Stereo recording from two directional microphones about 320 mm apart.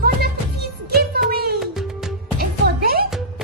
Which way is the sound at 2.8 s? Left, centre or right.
Right.